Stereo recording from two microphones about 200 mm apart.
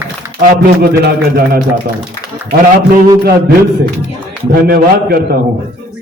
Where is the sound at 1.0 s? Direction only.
50° right (ahead or behind).